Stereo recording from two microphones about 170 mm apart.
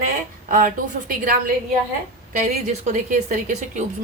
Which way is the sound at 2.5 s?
50° right (ahead or behind).